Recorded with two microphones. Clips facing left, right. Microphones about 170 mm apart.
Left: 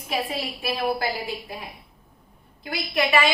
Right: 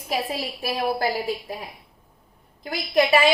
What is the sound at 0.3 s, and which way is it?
Speech, 40° right (ahead or behind).